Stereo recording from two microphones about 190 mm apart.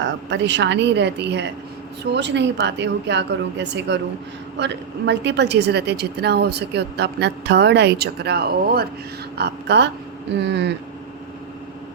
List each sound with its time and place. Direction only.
0.0 s a woman's voice: 70° right (ahead or behind)